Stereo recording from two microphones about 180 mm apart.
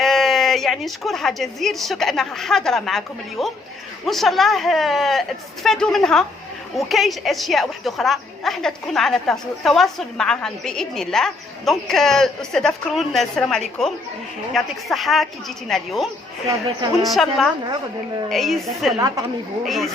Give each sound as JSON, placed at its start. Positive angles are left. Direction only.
{"t": 0.0, "sound": "a woman's voice", "side_deg": 0}
{"t": 18.9, "sound": "a woman's voice", "side_deg": -20}
{"t": 19.6, "sound": "a woman's voice", "side_deg": 0}